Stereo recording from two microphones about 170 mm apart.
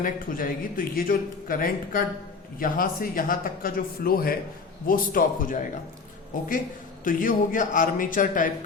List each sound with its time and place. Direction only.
0.0 s a man's voice: 55° left (ahead or behind)
7.0 s a man's voice: 55° left (ahead or behind)